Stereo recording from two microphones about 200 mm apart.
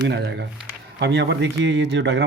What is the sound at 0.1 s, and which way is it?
Speech, 55° right (ahead or behind).